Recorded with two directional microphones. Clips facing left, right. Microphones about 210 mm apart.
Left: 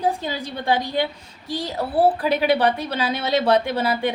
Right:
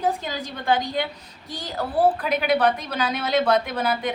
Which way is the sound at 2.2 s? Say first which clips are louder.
Left 2 dB; 30° left (ahead or behind).